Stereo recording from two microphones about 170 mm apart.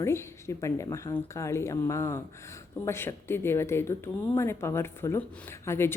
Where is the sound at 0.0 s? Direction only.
15° left (ahead or behind).